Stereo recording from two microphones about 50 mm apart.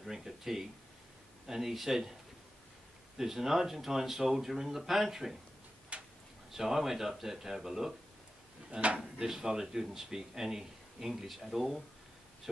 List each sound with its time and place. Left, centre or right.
0.0 s speech: centre
3.2 s speech: centre
5.9 s a sound: right
6.5 s speech: centre
8.7 s speech: right
9.2 s speech: centre